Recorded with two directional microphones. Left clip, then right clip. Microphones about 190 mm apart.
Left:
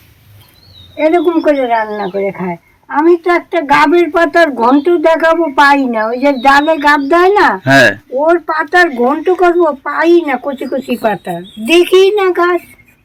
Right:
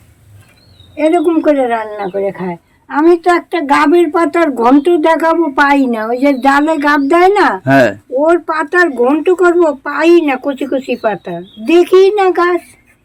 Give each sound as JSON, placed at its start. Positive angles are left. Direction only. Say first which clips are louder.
{"t": 1.0, "sound": "speech", "louder": "even", "side_deg": -15}
{"t": 7.6, "sound": "speech", "louder": "left 2 dB", "side_deg": -5}
{"t": 8.2, "sound": "speech", "louder": "even", "side_deg": -20}
{"t": 10.8, "sound": "speech", "louder": "left 1 dB", "side_deg": -5}